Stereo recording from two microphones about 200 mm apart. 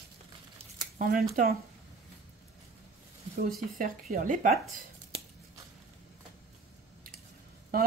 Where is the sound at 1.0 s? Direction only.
45° right (ahead or behind).